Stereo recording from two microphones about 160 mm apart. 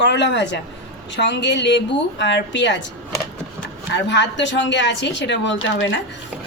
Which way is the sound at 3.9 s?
90° left.